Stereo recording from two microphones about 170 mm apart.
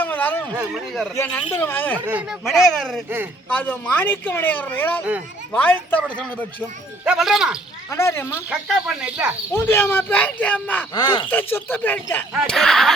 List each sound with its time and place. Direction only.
0.0 s a sound: 10° left (ahead or behind)
0.5 s speech: 5° right (ahead or behind)
1.1 s speech: 10° left (ahead or behind)
2.0 s speech: 5° right (ahead or behind)
7.0 s speech: 5° right (ahead or behind)
7.9 s speech: 15° left (ahead or behind)
8.4 s speech: 5° right (ahead or behind)
9.5 s speech: 15° left (ahead or behind)
10.9 s speech: 25° left (ahead or behind)
11.5 s speech: 10° left (ahead or behind)